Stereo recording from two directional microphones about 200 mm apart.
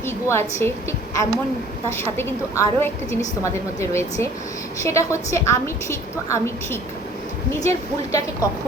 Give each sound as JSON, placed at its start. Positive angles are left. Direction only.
{"t": 0.0, "sound": "a woman's voice", "side_deg": 10}